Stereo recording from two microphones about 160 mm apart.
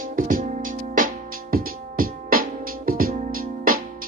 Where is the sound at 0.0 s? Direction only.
60° right (ahead or behind).